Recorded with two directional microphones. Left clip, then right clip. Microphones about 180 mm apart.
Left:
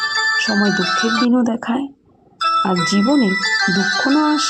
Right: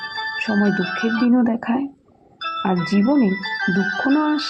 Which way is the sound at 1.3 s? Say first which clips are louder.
Left 1 dB; 15° left (ahead or behind).